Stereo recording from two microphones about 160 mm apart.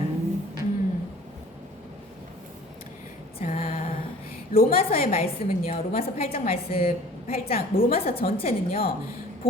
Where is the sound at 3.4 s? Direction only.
50° left (ahead or behind).